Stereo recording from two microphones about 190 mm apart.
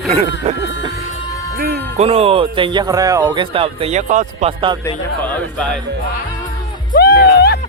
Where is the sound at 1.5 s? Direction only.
55° right (ahead or behind).